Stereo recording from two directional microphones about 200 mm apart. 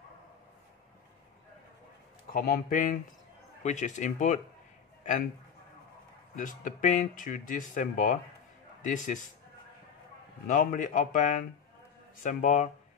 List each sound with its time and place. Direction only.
2.3 s a man's voice: 45° left (ahead or behind)
6.3 s speech: 40° left (ahead or behind)
10.4 s speech: 40° left (ahead or behind)